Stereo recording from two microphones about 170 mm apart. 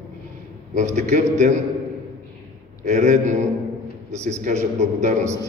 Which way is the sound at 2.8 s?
45° right (ahead or behind).